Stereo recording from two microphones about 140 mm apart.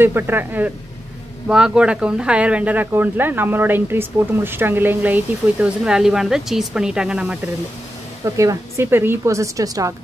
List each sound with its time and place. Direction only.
0.0 s speech: 15° right (ahead or behind)
8.4 s speech: 20° right (ahead or behind)